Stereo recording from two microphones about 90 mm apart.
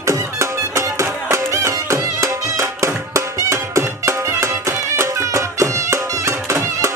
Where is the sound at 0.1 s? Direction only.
35° right (ahead or behind).